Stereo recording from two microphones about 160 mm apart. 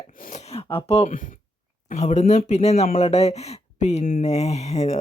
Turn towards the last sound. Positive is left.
turn(degrees=45)  # may be behind; listen again after turning